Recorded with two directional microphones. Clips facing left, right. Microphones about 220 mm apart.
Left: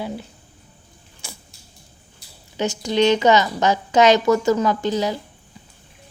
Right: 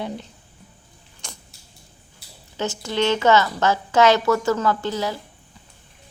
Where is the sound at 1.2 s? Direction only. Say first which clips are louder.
Left 1 dB; 5° left (ahead or behind).